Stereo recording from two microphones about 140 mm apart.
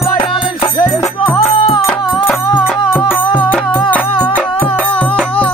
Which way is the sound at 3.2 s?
35° left (ahead or behind).